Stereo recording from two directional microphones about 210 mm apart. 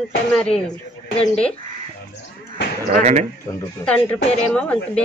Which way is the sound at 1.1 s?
30° left (ahead or behind).